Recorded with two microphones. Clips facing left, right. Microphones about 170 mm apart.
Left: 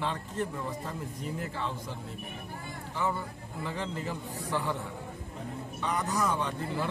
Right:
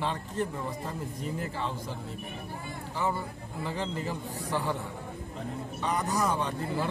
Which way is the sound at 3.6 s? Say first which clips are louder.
Right 2 dB; 30° right (ahead or behind).